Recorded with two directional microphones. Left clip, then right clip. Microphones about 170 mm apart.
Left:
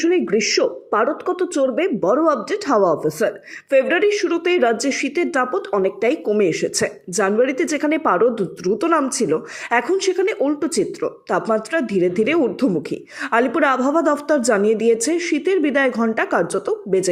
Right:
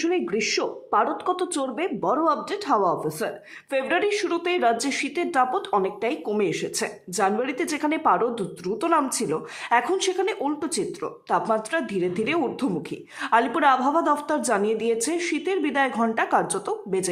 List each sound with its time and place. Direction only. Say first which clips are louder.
0.0 s a woman's voice: left 7 dB; 15° left (ahead or behind)